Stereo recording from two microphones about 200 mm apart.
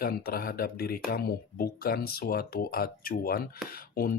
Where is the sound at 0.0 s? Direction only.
50° left (ahead or behind).